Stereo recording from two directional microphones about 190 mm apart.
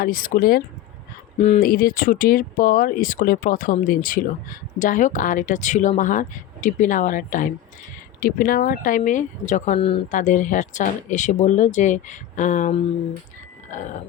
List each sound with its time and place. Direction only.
0.0 s speech: 45° left (ahead or behind)
1.4 s speech: 35° left (ahead or behind)
1.6 s speech: 50° left (ahead or behind)
13.7 s a sound: 40° left (ahead or behind)